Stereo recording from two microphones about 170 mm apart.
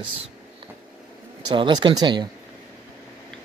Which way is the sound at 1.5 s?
25° right (ahead or behind).